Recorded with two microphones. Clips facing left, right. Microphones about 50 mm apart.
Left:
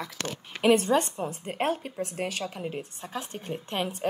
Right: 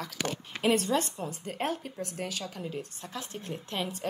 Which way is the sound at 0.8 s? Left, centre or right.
Left.